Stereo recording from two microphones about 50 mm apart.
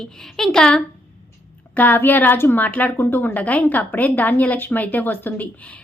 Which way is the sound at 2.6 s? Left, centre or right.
Left.